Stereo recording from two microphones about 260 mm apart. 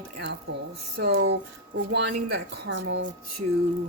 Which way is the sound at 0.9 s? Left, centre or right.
Right.